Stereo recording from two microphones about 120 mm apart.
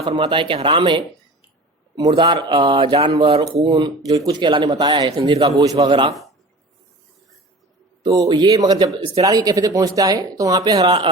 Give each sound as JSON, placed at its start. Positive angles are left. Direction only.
{"t": 0.0, "sound": "speech", "side_deg": -45}
{"t": 5.3, "sound": "a man's voice", "side_deg": -55}
{"t": 5.6, "sound": "speech", "side_deg": -35}
{"t": 8.0, "sound": "speech", "side_deg": -35}
{"t": 10.8, "sound": "speech", "side_deg": -45}